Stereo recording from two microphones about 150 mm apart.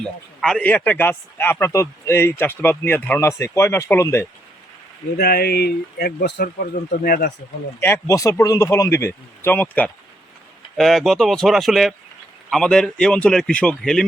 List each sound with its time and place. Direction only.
0.0 s a man's voice: 5° left (ahead or behind)
5.1 s speech: 90° left
7.8 s a man's voice: 15° left (ahead or behind)